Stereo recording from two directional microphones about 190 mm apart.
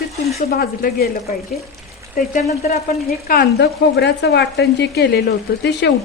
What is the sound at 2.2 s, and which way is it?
Speech, 45° left (ahead or behind).